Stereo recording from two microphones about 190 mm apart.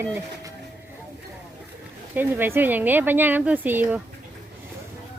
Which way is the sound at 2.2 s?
10° right (ahead or behind).